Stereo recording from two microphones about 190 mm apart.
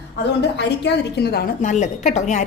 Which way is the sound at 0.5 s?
65° left (ahead or behind).